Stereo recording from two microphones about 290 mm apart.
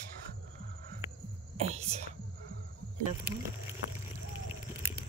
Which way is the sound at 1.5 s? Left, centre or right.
Right.